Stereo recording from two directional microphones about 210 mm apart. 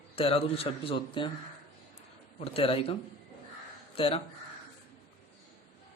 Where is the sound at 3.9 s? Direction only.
25° left (ahead or behind).